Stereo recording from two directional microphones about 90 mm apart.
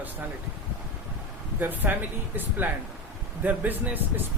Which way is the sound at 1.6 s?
20° right (ahead or behind).